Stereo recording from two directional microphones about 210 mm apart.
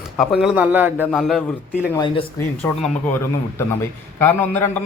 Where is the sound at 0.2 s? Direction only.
Centre (ahead or behind).